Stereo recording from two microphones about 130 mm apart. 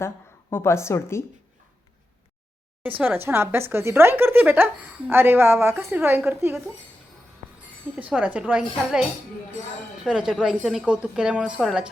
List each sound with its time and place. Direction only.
0.5 s a woman's voice: 20° left (ahead or behind)
3.0 s a woman's voice: 15° right (ahead or behind)
7.9 s a woman's voice: 10° right (ahead or behind)